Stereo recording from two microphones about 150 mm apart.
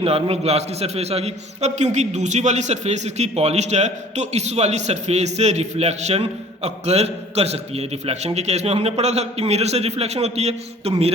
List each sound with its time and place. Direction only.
0.0 s a man's voice: 40° right (ahead or behind)